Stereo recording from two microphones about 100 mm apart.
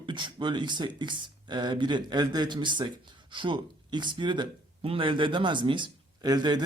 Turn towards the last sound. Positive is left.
turn(degrees=-45)  # may be behind; listen again after turning